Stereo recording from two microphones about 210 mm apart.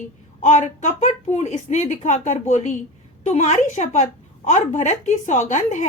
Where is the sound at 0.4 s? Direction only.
35° left (ahead or behind).